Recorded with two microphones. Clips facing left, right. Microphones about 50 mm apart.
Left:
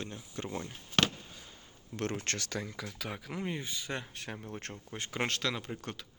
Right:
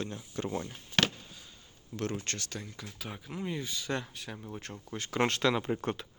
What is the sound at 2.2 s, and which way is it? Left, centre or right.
Speech, left.